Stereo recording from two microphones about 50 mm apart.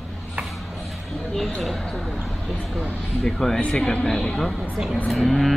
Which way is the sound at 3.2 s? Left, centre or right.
Centre.